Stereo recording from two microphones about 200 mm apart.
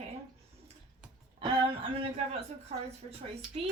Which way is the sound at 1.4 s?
25° right (ahead or behind).